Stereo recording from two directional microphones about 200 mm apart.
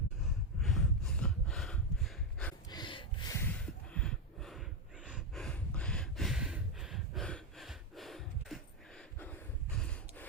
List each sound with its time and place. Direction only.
0.6 s gasp: centre (ahead or behind)
2.6 s gasp: 20° left (ahead or behind)
3.9 s snort: 5° left (ahead or behind)